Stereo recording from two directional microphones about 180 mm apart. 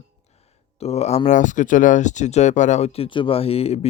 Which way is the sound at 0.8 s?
35° left (ahead or behind).